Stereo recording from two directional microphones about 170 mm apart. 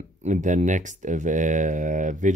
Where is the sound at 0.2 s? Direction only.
45° right (ahead or behind).